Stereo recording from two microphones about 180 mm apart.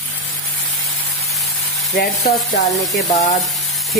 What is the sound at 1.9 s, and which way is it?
Sizzle, 60° left (ahead or behind).